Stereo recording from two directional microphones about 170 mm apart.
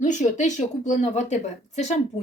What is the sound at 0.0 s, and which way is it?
A woman's voice, 45° left (ahead or behind).